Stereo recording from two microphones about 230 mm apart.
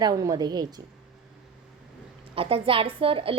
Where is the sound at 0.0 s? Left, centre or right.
Centre.